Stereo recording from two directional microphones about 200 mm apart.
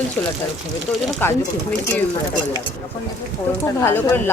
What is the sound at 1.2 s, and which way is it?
Speech, 10° left (ahead or behind).